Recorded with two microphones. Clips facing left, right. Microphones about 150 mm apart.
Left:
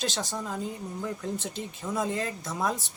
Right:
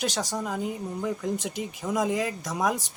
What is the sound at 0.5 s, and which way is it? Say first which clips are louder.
Speech: right 4 dB; 15° right (ahead or behind).